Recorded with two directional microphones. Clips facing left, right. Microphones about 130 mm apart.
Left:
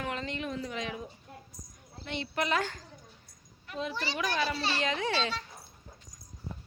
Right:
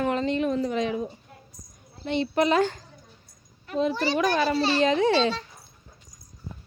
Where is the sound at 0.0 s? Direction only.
35° right (ahead or behind).